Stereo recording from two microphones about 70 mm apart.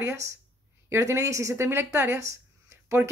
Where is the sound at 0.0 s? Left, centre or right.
Right.